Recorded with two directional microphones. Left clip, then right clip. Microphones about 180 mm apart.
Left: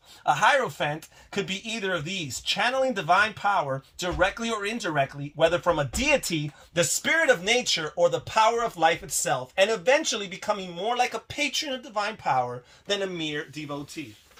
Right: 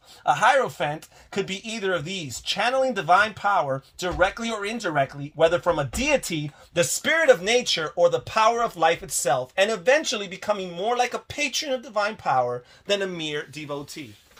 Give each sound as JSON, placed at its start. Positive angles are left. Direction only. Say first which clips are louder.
{"t": 0.3, "sound": "speech", "louder": "right 2 dB", "side_deg": -40}